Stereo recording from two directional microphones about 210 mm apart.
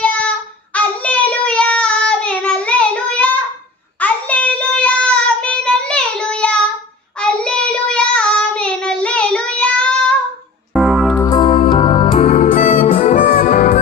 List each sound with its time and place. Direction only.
0.0 s child singing: 5° left (ahead or behind)
10.8 s music: centre (ahead or behind)
11.2 s music: 20° left (ahead or behind); by 13.7 s 40° left (ahead or behind)